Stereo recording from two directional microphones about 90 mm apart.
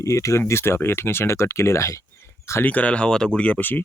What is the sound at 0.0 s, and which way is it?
Speech, 35° left (ahead or behind).